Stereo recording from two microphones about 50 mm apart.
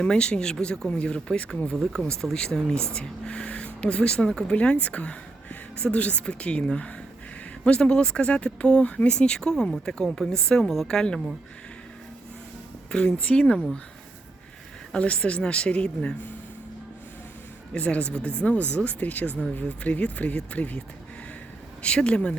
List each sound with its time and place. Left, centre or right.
0.0 s a woman's voice: centre
1.7 s a woman's voice: centre
4.5 s a woman's voice: left
12.9 s speech: centre
13.1 s speech: left
14.9 s speech: left
17.7 s speech: left